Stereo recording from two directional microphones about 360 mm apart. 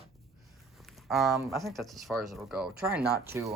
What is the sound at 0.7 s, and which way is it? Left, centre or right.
Speech, centre.